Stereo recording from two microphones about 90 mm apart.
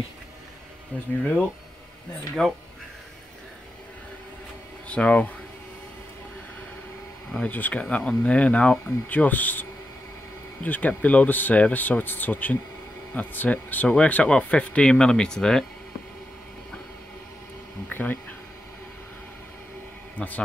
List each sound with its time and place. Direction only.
0.9 s speech: 15° left (ahead or behind)
2.4 s speech: 5° left (ahead or behind)
4.8 s speech: 15° left (ahead or behind)
7.4 s speech: 15° left (ahead or behind)
17.8 s insect: 20° left (ahead or behind)
20.2 s speech: 15° left (ahead or behind)